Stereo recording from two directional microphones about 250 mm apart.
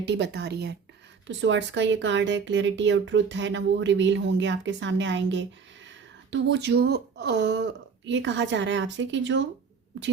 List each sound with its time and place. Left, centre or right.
0.0 s speech: right